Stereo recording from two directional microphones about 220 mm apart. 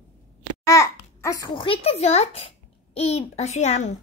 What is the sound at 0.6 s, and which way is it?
A child's voice, 15° left (ahead or behind).